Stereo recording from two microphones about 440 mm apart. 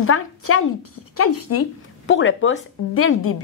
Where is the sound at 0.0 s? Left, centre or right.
Left.